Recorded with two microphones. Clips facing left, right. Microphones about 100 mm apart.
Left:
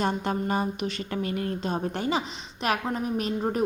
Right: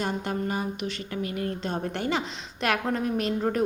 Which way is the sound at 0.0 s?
35° left (ahead or behind).